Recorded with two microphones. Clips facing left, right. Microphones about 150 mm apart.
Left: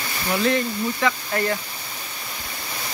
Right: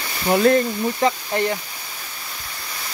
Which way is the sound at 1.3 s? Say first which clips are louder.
Right 2 dB; 20° right (ahead or behind).